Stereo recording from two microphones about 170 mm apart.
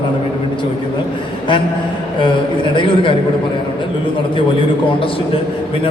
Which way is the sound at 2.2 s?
30° left (ahead or behind).